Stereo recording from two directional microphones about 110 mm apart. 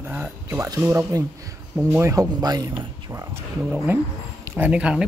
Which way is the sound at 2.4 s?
35° right (ahead or behind).